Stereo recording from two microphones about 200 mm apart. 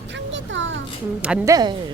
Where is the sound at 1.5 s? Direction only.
20° right (ahead or behind).